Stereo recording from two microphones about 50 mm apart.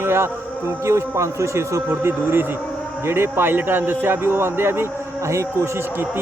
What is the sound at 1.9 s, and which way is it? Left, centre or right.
A man's voice, right.